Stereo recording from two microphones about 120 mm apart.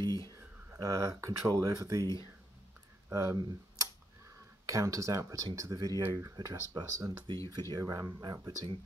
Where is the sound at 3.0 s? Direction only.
25° right (ahead or behind).